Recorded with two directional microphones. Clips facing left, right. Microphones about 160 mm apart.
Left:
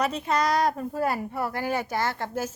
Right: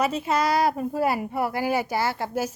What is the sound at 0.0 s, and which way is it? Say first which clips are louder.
A woman's voice: right 2 dB; 5° right (ahead or behind).